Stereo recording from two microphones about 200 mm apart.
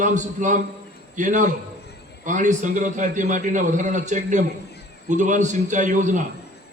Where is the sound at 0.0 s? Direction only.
40° right (ahead or behind).